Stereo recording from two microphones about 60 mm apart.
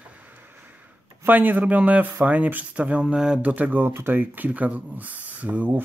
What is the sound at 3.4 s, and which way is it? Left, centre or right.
Speech, right.